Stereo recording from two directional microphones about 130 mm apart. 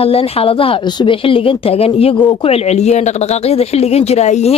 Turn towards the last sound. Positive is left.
turn(degrees=60)  # may be behind; listen again after turning